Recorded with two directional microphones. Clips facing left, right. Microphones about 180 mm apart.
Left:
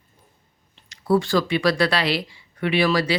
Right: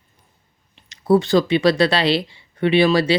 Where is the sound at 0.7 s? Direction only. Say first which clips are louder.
Right 4 dB; 20° right (ahead or behind).